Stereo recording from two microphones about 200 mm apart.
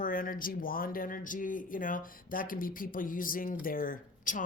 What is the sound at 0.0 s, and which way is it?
Speech, 45° left (ahead or behind).